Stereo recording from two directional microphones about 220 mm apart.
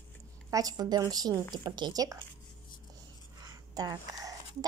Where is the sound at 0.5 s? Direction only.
15° right (ahead or behind).